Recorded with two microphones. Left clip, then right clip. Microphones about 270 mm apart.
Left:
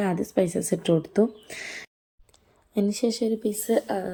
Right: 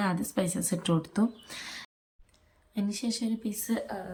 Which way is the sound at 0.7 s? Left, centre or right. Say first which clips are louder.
Left 7 dB; centre.